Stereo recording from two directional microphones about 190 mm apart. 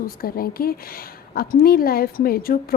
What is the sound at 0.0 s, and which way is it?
Speech, 50° left (ahead or behind).